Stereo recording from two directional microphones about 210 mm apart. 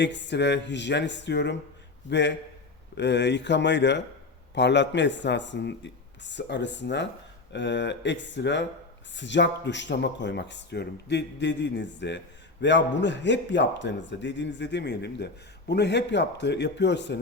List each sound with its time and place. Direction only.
0.0 s a man's voice: 55° left (ahead or behind)